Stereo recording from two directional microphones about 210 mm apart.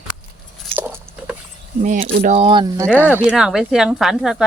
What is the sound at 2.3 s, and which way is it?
Speech, 30° right (ahead or behind).